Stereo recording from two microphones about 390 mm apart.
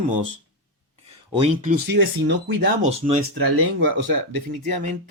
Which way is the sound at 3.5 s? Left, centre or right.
Right.